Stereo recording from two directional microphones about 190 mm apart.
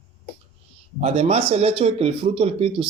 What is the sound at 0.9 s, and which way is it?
Speech, 30° right (ahead or behind).